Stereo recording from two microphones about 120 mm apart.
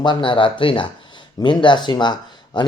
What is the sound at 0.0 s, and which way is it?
Speech, 40° left (ahead or behind).